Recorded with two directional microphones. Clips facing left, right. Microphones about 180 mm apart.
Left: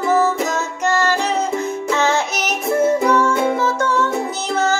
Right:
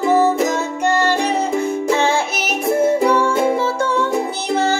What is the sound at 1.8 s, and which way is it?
Music, 30° right (ahead or behind).